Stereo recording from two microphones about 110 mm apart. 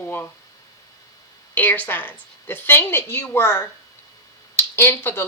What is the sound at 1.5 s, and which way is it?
Speech, 15° left (ahead or behind).